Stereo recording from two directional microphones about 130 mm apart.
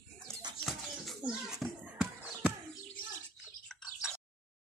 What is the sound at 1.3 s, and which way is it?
Children playing, 5° right (ahead or behind).